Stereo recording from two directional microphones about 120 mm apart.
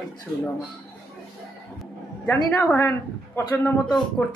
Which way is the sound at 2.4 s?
25° left (ahead or behind).